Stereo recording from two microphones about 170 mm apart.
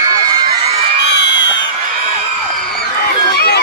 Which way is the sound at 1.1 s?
90° left.